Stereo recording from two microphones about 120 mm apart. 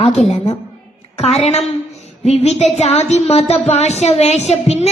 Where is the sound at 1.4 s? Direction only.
65° left (ahead or behind).